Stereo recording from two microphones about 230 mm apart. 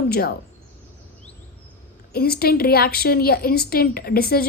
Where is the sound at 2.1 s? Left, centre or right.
Left.